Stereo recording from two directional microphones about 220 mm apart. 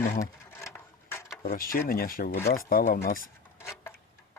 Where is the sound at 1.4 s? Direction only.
40° left (ahead or behind).